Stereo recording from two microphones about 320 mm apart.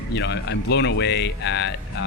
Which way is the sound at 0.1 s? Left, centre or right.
Left.